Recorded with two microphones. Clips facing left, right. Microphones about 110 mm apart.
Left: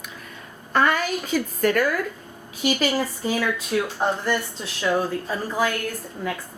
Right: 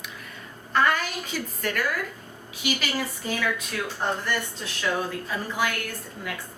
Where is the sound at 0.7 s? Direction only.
45° left (ahead or behind).